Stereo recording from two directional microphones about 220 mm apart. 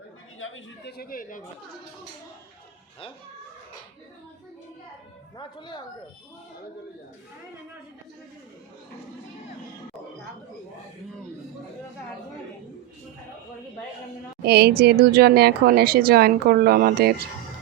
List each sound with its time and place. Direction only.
0.3 s chatter: 65° left (ahead or behind)
0.9 s speech: 40° left (ahead or behind)
5.4 s speech: 20° left (ahead or behind)
14.4 s a woman's voice: 45° right (ahead or behind)